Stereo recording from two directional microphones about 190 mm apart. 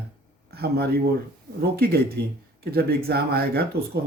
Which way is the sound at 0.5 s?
55° right (ahead or behind).